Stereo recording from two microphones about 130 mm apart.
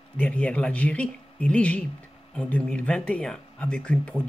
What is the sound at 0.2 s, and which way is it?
Speech, 10° left (ahead or behind).